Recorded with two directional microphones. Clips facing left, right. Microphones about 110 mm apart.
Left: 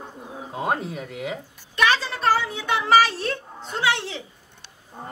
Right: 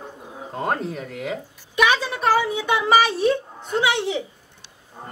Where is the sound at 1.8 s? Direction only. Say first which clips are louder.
Right 2 dB; 15° right (ahead or behind).